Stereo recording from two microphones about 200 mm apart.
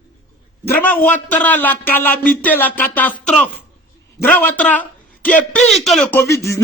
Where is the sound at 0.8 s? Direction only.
10° left (ahead or behind).